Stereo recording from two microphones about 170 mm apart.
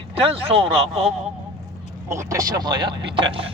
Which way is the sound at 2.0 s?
15° right (ahead or behind).